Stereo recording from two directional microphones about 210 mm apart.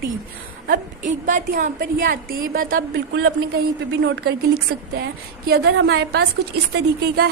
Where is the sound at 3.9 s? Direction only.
55° right (ahead or behind).